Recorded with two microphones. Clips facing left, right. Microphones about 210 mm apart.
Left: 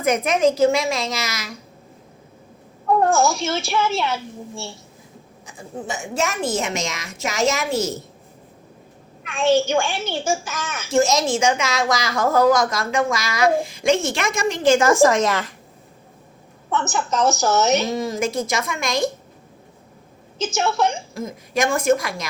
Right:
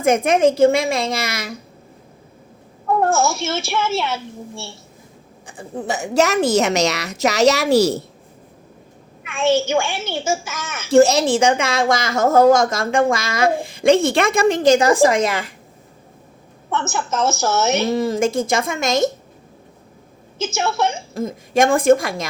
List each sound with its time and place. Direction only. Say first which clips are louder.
0.0 s speech: right 3 dB; 25° right (ahead or behind)
0.6 s a woman's voice: right 3 dB; 55° right (ahead or behind)
2.8 s a woman's voice: even; 5° right (ahead or behind)
5.7 s a woman's voice: right 8 dB; 65° right (ahead or behind)
9.2 s a woman's voice: even; 5° right (ahead or behind)
10.8 s a woman's voice: right 6 dB; 60° right (ahead or behind)
12.2 s speech: right 4 dB; 25° right (ahead or behind)
13.3 s a woman's voice: even; 55° right (ahead or behind)
14.7 s a woman's voice: left 1 dB; 15° right (ahead or behind)
16.9 s a woman's voice: left 1 dB; 5° right (ahead or behind)
18.6 s a woman's voice: right 4 dB; 50° right (ahead or behind)
20.4 s a woman's voice: even; 5° right (ahead or behind)
21.5 s a woman's voice: right 5 dB; 50° right (ahead or behind)
21.8 s speech: right 4 dB; 30° right (ahead or behind)